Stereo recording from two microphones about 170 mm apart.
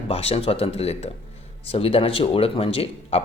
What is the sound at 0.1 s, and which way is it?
Speech, 35° left (ahead or behind).